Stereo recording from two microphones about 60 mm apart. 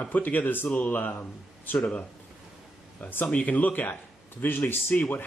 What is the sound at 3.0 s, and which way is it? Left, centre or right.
Speech, left.